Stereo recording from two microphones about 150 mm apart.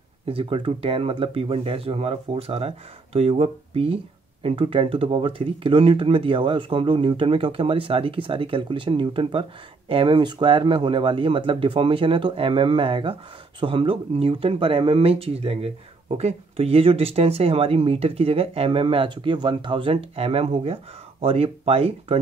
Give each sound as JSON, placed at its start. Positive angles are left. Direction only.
{"t": 0.3, "sound": "speech", "side_deg": -35}